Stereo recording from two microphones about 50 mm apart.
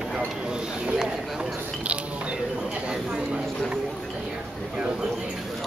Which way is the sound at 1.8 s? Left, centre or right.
Right.